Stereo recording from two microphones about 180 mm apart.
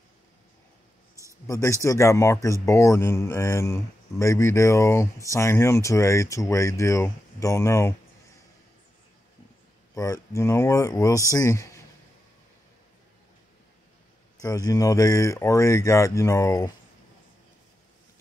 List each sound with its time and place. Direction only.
1.5 s speech: 15° left (ahead or behind)
9.9 s speech: 20° left (ahead or behind)
14.4 s speech: 20° left (ahead or behind)